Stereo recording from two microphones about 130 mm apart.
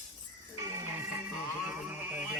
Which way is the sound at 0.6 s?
20° right (ahead or behind).